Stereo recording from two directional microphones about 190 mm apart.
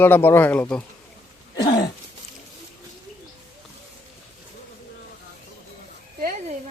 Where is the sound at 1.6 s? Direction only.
20° left (ahead or behind).